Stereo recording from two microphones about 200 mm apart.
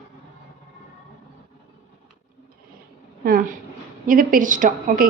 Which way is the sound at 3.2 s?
50° right (ahead or behind).